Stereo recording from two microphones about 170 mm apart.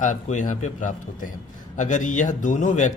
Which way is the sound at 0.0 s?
45° left (ahead or behind).